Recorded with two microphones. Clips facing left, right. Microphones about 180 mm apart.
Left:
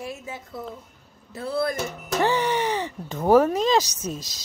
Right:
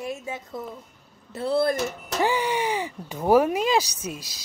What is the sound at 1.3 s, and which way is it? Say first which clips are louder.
Speech: right 3 dB; 30° right (ahead or behind).